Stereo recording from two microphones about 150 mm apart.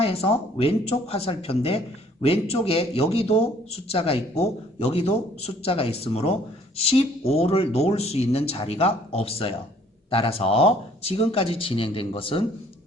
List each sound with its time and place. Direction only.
0.0 s speech: 40° left (ahead or behind)